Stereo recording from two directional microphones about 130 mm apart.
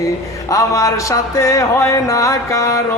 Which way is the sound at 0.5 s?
25° left (ahead or behind).